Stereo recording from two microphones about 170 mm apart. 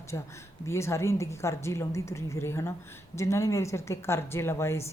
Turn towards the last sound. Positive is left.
turn(degrees=15)  # may be behind; listen again after turning